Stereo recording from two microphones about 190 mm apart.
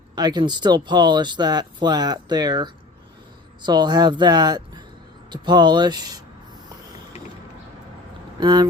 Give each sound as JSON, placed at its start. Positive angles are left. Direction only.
{"t": 0.2, "sound": "speech", "side_deg": -20}
{"t": 8.4, "sound": "speech", "side_deg": -25}